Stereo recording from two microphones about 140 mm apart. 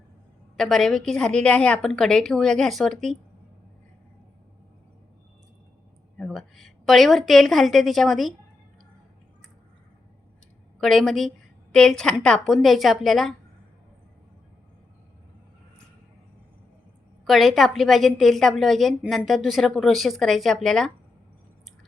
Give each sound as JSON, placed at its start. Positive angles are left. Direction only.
{"t": 0.5, "sound": "a woman's voice", "side_deg": 0}
{"t": 6.1, "sound": "a woman's voice", "side_deg": 5}
{"t": 10.8, "sound": "a woman's voice", "side_deg": 0}
{"t": 17.2, "sound": "a woman's voice", "side_deg": 0}